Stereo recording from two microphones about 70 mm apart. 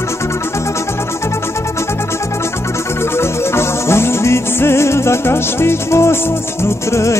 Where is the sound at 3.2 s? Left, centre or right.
Left.